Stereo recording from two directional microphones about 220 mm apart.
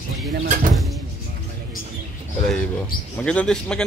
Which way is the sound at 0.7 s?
Centre (ahead or behind).